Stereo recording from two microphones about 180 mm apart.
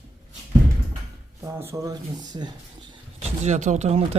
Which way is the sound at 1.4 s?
15° right (ahead or behind).